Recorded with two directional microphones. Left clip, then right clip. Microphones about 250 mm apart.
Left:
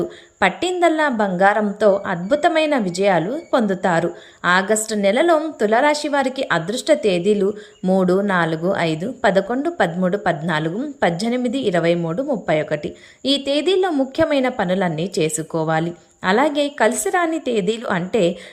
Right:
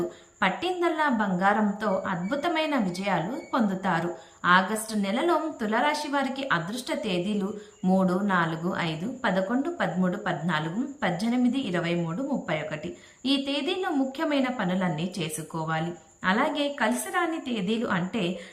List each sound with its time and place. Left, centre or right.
0.3 s a woman's voice: centre